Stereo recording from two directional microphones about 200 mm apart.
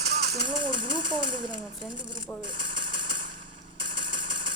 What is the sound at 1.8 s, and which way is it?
Speech, 25° right (ahead or behind).